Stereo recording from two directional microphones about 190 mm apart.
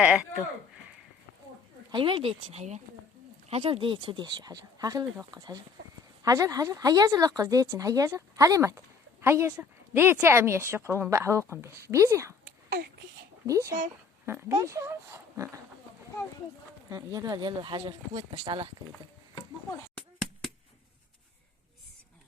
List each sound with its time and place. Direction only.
0.0 s speech: 5° right (ahead or behind)
1.9 s a woman's voice: 25° right (ahead or behind)
13.5 s a woman's voice: 15° right (ahead or behind)
16.9 s speech: 20° right (ahead or behind)